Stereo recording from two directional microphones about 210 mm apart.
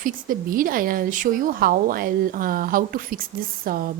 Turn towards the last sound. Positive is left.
turn(degrees=-45)  # may be behind; listen again after turning